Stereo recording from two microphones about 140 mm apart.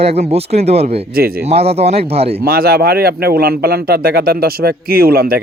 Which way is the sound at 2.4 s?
90° right.